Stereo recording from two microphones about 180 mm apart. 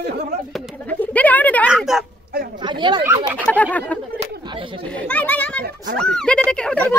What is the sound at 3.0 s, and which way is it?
Speech, 15° right (ahead or behind).